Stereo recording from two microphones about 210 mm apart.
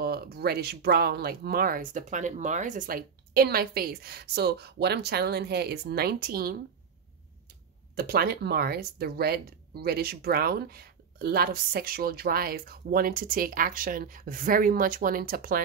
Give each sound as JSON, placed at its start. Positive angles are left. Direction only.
{"t": 0.0, "sound": "speech", "side_deg": -50}
{"t": 7.9, "sound": "speech", "side_deg": -45}